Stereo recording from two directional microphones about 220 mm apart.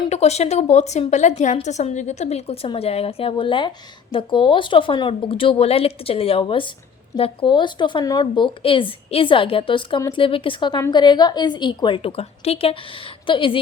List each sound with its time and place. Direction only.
0.0 s speech: 30° left (ahead or behind)